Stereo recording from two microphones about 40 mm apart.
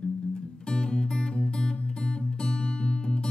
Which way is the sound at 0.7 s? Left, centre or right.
Left.